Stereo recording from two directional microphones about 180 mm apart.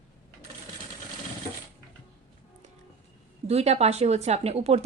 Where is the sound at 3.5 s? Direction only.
35° right (ahead or behind).